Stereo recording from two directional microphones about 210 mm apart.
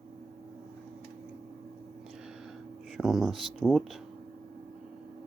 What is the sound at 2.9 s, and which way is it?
Speech, centre (ahead or behind).